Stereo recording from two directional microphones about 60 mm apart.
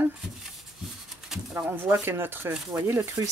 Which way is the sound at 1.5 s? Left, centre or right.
Right.